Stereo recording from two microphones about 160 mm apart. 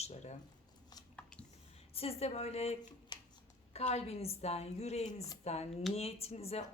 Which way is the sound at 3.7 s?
40° left (ahead or behind).